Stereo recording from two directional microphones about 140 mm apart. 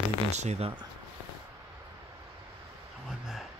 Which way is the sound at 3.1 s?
5° right (ahead or behind).